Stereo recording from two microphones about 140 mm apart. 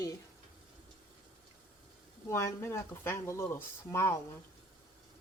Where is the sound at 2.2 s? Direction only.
20° left (ahead or behind).